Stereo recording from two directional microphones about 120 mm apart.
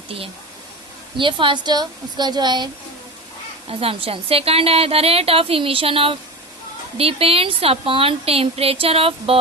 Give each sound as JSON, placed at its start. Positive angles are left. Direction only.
{"t": 1.1, "sound": "speech", "side_deg": -45}
{"t": 3.7, "sound": "a woman's voice", "side_deg": -50}